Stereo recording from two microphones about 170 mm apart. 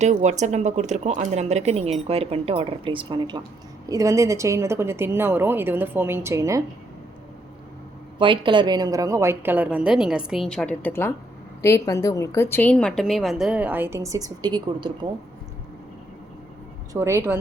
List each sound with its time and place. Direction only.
0.0 s a woman's voice: 40° right (ahead or behind); by 6.6 s 15° right (ahead or behind)
8.2 s a woman's voice: 30° right (ahead or behind)
16.9 s a woman's voice: 15° right (ahead or behind)